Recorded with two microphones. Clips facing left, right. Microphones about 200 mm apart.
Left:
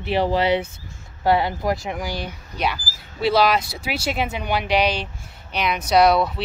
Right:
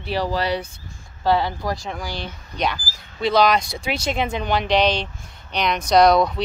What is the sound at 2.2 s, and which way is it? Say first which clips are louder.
Speech: even; 10° left (ahead or behind).